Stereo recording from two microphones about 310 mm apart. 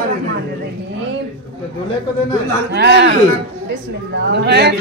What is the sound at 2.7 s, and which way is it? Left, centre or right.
Speech, right.